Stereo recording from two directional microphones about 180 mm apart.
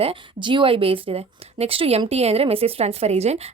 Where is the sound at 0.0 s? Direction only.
30° right (ahead or behind).